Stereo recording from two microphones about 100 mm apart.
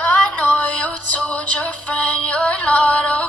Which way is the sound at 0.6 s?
15° left (ahead or behind).